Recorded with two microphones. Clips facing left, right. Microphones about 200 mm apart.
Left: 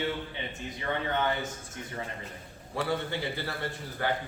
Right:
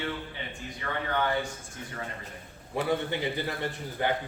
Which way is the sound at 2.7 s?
15° right (ahead or behind).